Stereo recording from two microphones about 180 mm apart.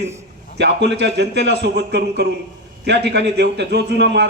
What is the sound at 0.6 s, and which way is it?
A man's voice, 70° right (ahead or behind).